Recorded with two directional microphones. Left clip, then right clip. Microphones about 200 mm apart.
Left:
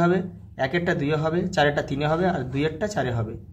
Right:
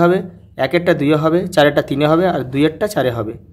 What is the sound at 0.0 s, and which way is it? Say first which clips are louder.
Speech: right 8 dB; 45° right (ahead or behind).